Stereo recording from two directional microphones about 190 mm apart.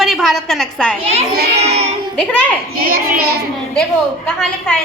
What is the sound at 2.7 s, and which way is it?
Speech, 50° right (ahead or behind).